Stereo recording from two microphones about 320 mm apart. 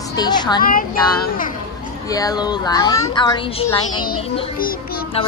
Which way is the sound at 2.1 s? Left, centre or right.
Centre.